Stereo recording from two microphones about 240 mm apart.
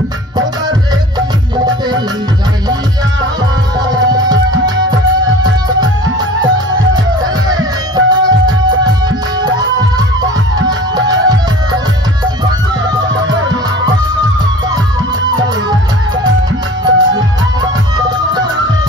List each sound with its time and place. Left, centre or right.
3.9 s music: centre
16.8 s music: centre